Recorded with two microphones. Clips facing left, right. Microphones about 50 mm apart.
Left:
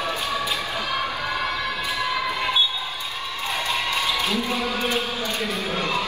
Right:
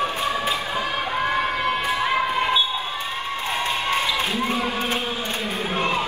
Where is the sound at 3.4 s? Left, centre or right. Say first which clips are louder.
Right 1 dB; right.